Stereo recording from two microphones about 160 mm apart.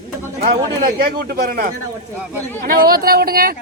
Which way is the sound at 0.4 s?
50° right (ahead or behind).